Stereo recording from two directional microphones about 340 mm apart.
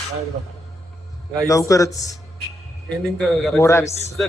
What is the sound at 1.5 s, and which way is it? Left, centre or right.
Speech, centre.